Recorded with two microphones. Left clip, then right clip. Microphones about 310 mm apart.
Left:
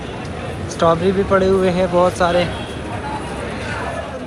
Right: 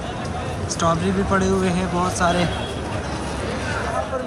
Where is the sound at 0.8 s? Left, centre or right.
Centre.